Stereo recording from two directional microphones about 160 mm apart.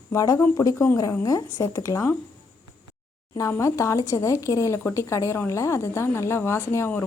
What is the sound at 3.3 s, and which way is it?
Speech, 20° left (ahead or behind).